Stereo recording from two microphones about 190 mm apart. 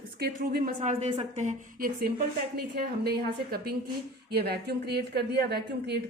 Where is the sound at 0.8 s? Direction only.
35° right (ahead or behind).